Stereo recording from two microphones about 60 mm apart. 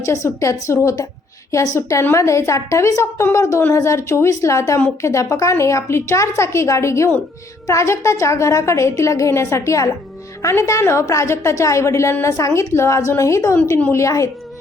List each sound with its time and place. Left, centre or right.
0.0 s a woman's voice: left
11.0 s a woman's voice: left